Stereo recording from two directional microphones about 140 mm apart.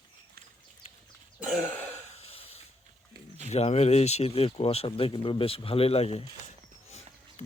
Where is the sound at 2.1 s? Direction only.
45° left (ahead or behind).